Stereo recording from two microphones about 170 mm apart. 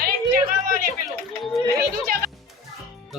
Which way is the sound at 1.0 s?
Centre (ahead or behind).